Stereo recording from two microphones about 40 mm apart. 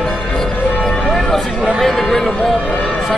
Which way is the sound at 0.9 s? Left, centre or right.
Centre.